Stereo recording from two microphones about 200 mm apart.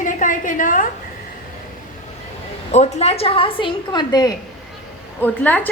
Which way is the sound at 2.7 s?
30° left (ahead or behind).